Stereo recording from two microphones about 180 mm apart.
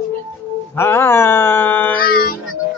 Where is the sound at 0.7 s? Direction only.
15° left (ahead or behind).